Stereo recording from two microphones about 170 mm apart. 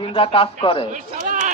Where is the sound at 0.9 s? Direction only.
45° right (ahead or behind).